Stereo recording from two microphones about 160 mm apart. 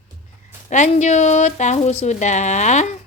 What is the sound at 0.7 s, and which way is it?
A woman's voice, 50° left (ahead or behind).